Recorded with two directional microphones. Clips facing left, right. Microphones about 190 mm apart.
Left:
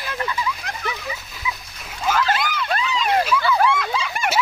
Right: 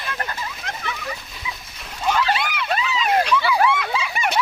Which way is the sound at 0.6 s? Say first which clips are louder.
Left 1 dB; centre (ahead or behind).